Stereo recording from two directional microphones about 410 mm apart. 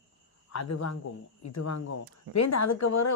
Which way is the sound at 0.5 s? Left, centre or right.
Left.